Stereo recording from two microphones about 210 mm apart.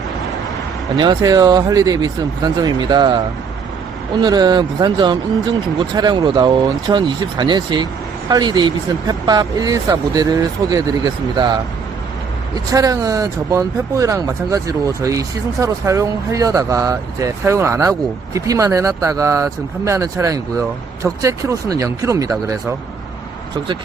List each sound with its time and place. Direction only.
0.9 s speech: 20° right (ahead or behind)
12.5 s speech: 20° right (ahead or behind)